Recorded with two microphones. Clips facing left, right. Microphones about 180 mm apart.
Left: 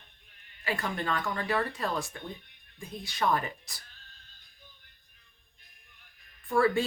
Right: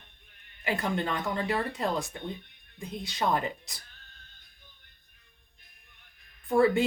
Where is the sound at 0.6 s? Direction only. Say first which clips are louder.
Right 3 dB; 20° right (ahead or behind).